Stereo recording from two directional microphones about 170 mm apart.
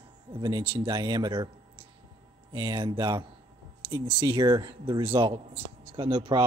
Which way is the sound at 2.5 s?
25° right (ahead or behind).